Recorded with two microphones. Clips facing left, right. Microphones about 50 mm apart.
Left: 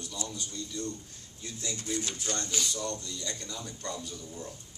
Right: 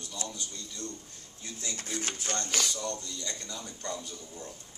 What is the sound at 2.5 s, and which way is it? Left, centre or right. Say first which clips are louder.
Speech: right 2 dB; right.